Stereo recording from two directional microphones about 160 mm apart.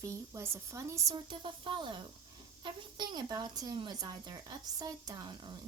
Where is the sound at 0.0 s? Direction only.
15° right (ahead or behind).